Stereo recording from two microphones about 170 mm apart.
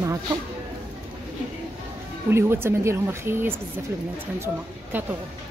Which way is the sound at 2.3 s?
15° right (ahead or behind).